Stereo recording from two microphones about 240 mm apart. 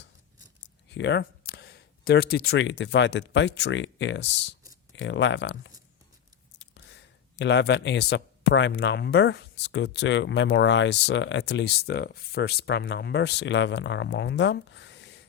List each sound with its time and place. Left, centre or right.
0.9 s speech: left